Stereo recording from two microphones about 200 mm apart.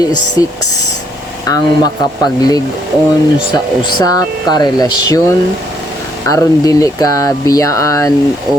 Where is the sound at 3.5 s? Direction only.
20° left (ahead or behind).